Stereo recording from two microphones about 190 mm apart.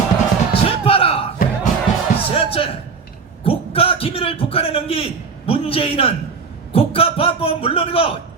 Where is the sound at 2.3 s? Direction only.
30° left (ahead or behind).